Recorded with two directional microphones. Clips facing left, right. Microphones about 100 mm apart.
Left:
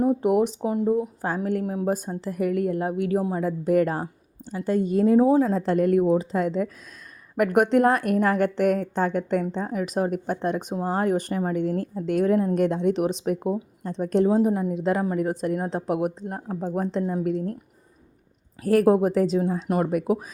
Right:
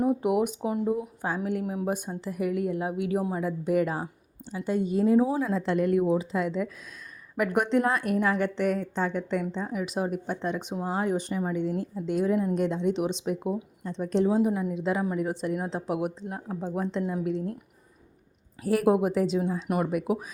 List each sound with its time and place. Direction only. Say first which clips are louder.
0.2 s speech: left 4 dB; 35° left (ahead or behind)
1.6 s a woman's voice: left 4 dB; 30° left (ahead or behind)
3.2 s a woman's voice: left 3 dB; 30° left (ahead or behind)
3.4 s a woman's voice: left 6 dB; 45° left (ahead or behind)
5.2 s a woman's voice: left 7 dB; 40° left (ahead or behind)
10.7 s a woman's voice: left 4 dB; 40° left (ahead or behind)
18.6 s a woman's voice: left 4 dB; 45° left (ahead or behind)